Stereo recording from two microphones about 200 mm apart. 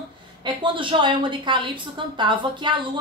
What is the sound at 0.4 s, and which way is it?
A woman's voice, 25° right (ahead or behind).